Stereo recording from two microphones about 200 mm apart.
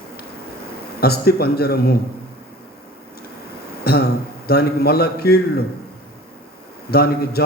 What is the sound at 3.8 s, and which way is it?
A man's voice, 50° left (ahead or behind).